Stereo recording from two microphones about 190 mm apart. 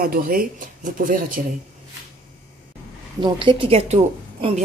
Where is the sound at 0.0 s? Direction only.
50° right (ahead or behind).